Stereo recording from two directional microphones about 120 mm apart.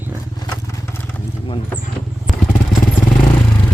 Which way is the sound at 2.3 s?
Centre (ahead or behind).